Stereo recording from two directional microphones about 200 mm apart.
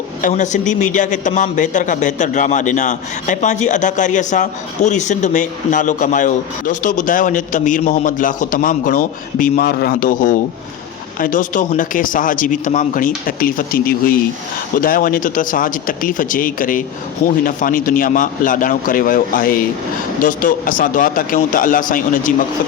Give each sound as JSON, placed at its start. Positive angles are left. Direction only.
{"t": 0.2, "sound": "a man's voice", "side_deg": 40}